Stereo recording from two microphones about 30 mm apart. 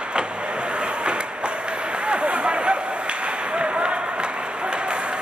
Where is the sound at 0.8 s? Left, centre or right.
Right.